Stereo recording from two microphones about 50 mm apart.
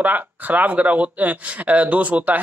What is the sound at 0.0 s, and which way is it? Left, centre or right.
Speech, right.